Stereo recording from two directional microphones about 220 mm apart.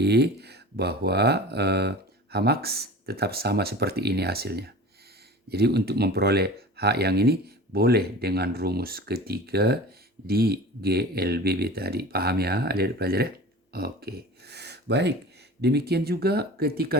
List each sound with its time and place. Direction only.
0.0 s speech: 50° right (ahead or behind)